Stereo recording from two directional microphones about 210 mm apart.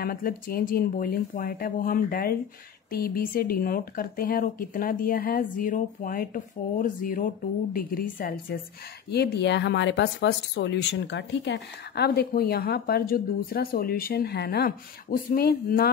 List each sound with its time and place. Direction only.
0.0 s speech: 45° left (ahead or behind)